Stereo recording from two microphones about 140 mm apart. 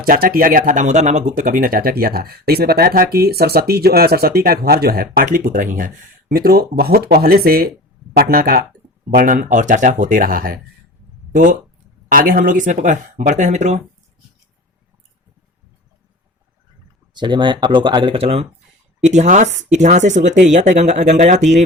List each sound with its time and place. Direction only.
0.0 s speech: 90° right; by 1.5 s 55° right (ahead or behind)
1.5 s speech: 85° right
9.0 s speech: 70° right (ahead or behind); by 10.6 s 90° right
12.0 s speech: 90° right; by 13.8 s 60° right (ahead or behind)
17.2 s speech: 35° right (ahead or behind)
19.0 s speech: 55° right (ahead or behind)